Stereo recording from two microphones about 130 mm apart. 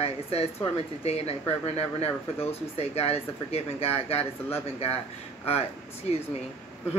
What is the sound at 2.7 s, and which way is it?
Speech, 50° left (ahead or behind).